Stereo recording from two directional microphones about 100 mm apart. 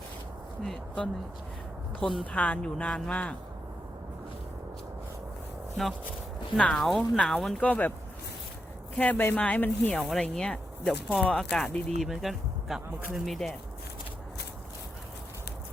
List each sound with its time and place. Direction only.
0.6 s speech: 5° left (ahead or behind)
6.6 s speech: 5° left (ahead or behind)
7.6 s speech: 15° left (ahead or behind)
9.0 s speech: 15° left (ahead or behind)
10.0 s speech: 5° left (ahead or behind)